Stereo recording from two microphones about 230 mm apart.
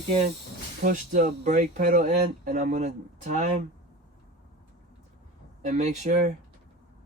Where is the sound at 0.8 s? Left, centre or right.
Right.